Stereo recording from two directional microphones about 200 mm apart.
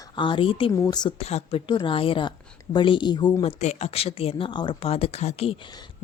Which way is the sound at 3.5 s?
35° left (ahead or behind).